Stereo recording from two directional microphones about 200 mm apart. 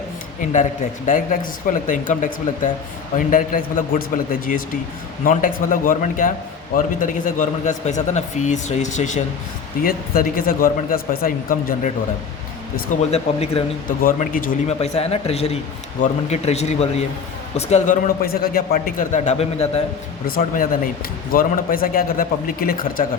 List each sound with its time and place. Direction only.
0.5 s a man's voice: 40° left (ahead or behind)
12.7 s a man's voice: 35° left (ahead or behind)
14.0 s a man's voice: 45° left (ahead or behind)
20.2 s speech: 45° left (ahead or behind)